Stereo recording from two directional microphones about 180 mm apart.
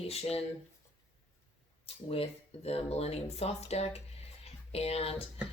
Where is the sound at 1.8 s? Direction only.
35° left (ahead or behind).